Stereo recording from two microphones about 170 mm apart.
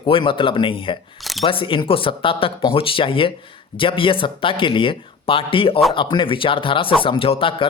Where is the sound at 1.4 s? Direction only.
30° left (ahead or behind).